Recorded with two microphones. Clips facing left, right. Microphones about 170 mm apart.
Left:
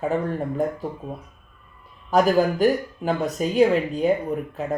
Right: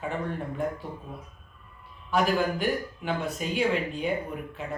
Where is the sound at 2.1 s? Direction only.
40° left (ahead or behind).